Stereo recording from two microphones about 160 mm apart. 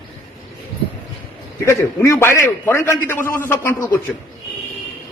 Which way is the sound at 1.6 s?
15° left (ahead or behind).